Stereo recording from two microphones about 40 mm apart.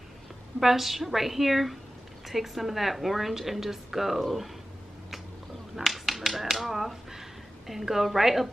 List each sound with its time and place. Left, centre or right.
0.6 s a woman's voice: centre
5.9 s speech: centre